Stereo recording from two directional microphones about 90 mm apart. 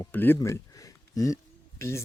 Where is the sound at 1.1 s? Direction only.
40° left (ahead or behind).